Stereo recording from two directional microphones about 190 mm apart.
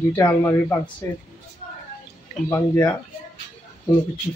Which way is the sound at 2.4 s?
15° left (ahead or behind).